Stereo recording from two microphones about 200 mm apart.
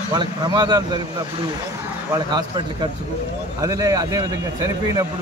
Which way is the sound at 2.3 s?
20° right (ahead or behind).